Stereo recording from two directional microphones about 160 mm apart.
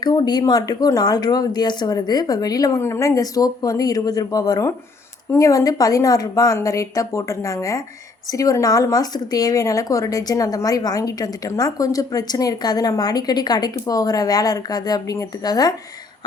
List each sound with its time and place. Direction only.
0.0 s speech: 25° left (ahead or behind)